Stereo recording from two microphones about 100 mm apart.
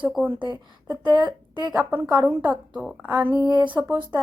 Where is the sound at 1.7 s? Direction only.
15° right (ahead or behind).